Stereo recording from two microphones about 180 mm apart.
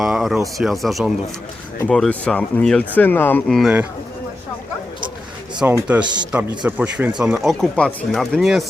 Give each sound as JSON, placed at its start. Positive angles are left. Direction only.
{"t": 0.0, "sound": "speech", "side_deg": 0}
{"t": 3.6, "sound": "speech", "side_deg": -5}
{"t": 5.5, "sound": "speech", "side_deg": -10}